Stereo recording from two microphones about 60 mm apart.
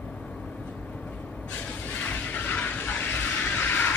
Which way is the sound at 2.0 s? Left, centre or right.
Left.